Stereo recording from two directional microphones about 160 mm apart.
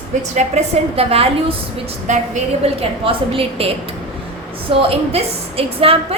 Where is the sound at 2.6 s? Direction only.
35° right (ahead or behind).